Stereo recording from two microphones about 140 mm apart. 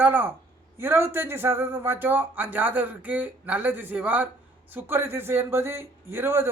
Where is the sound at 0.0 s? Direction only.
15° right (ahead or behind).